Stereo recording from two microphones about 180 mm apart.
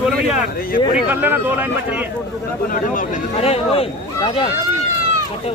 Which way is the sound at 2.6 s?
50° left (ahead or behind).